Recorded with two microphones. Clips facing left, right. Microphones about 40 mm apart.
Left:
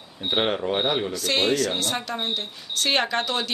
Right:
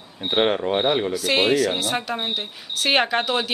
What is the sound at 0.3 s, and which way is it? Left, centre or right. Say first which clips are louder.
Speech: right 3 dB; centre.